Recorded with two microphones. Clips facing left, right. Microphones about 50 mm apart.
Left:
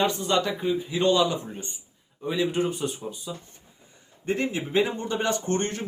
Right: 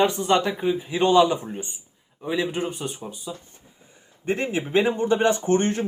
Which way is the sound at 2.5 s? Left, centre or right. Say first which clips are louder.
Left 2 dB; centre.